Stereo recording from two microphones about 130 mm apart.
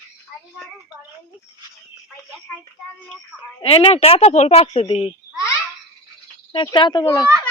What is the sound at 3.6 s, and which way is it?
A woman's voice, 50° left (ahead or behind).